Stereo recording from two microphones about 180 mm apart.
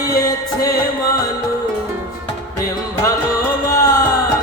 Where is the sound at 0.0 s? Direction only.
20° left (ahead or behind).